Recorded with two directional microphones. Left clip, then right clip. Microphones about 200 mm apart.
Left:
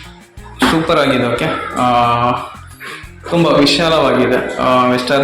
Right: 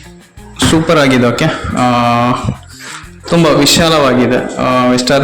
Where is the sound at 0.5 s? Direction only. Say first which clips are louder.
Right 3 dB; 50° right (ahead or behind).